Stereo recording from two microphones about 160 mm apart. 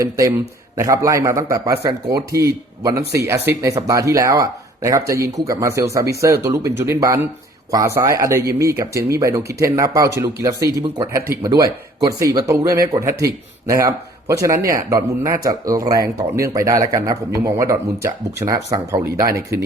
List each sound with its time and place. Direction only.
0.8 s speech: 20° right (ahead or behind)
3.0 s speech: 90° right
3.2 s speech: 20° right (ahead or behind)